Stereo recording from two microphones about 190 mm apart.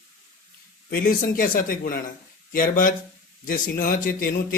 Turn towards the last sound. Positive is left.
turn(degrees=50)  # may be behind; listen again after turning